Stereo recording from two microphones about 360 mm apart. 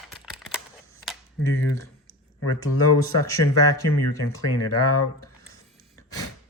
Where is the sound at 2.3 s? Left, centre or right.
Left.